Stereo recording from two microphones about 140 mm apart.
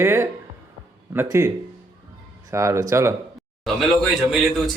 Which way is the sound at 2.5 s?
20° right (ahead or behind).